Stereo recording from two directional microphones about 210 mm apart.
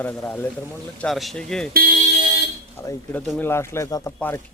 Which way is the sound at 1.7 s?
45° right (ahead or behind).